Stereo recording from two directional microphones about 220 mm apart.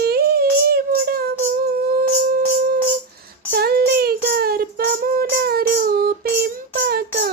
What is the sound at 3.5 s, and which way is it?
Child singing, 45° right (ahead or behind).